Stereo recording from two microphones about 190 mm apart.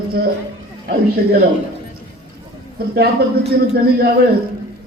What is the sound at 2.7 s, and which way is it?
A man's voice, 55° right (ahead or behind).